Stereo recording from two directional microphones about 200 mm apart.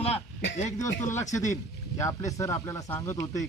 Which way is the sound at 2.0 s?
15° left (ahead or behind).